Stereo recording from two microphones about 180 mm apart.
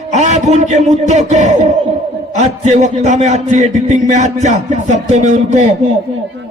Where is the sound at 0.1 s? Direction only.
40° right (ahead or behind).